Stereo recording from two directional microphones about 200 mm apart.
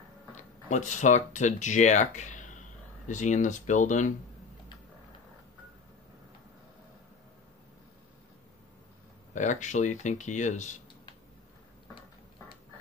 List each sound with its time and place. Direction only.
0.4 s speech: 35° left (ahead or behind)
9.3 s speech: 35° left (ahead or behind)